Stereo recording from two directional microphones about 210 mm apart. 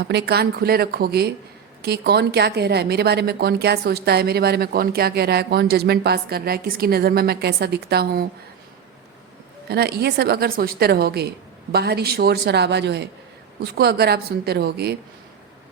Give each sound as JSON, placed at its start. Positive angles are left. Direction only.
{"t": 0.0, "sound": "speech", "side_deg": -50}
{"t": 9.6, "sound": "speech", "side_deg": -50}